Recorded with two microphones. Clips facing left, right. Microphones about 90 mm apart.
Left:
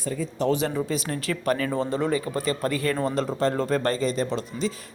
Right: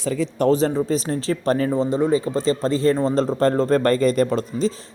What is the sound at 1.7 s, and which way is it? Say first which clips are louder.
A man's voice: right 6 dB; 20° right (ahead or behind).